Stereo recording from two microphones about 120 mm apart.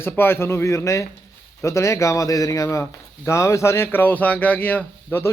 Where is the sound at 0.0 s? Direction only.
20° left (ahead or behind).